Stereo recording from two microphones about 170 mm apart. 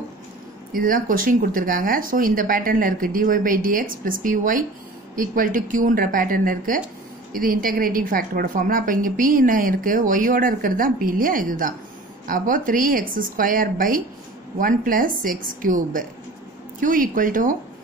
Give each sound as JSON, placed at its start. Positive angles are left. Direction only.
{"t": 0.7, "sound": "a woman's voice", "side_deg": -55}